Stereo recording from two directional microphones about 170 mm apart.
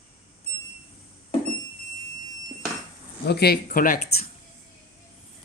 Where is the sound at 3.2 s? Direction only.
70° left (ahead or behind).